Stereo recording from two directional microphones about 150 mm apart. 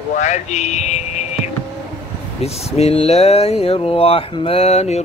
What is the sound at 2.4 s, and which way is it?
Speech, 45° left (ahead or behind).